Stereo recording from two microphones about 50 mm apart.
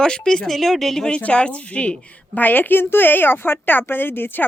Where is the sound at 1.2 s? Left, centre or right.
Left.